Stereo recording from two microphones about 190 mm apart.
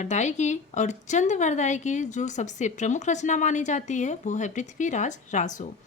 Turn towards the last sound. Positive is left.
turn(degrees=40)  # may be behind; listen again after turning